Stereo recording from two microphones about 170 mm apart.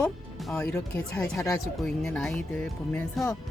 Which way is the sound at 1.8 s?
Centre (ahead or behind).